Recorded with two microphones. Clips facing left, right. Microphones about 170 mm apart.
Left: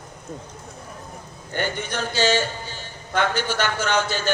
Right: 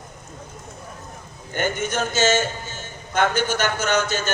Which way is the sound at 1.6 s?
45° right (ahead or behind).